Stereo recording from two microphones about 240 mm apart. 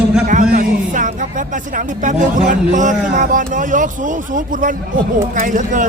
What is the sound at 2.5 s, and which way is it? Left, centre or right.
A man's voice, right.